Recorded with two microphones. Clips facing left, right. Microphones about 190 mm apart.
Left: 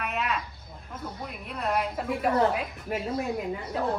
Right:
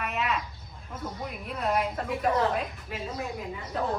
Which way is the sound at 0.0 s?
Centre (ahead or behind).